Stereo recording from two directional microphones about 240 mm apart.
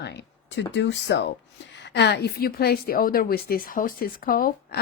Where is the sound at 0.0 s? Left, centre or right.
Left.